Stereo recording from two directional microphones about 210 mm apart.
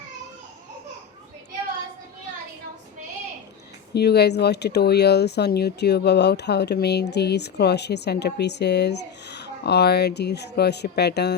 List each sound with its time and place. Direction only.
3.9 s speech: 50° left (ahead or behind)